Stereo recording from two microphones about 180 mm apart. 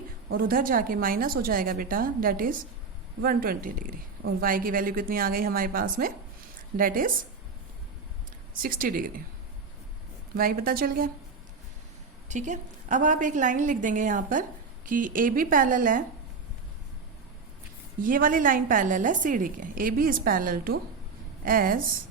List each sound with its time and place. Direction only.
0.3 s a woman's voice: 55° right (ahead or behind)
8.6 s a woman's voice: 50° right (ahead or behind)
10.3 s a woman's voice: 55° right (ahead or behind)
12.3 s a woman's voice: 45° right (ahead or behind)
18.0 s a woman's voice: 50° right (ahead or behind)